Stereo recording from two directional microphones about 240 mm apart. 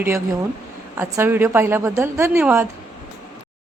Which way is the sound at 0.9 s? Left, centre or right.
Centre.